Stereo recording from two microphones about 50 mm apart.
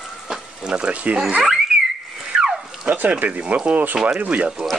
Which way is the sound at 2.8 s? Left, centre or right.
Right.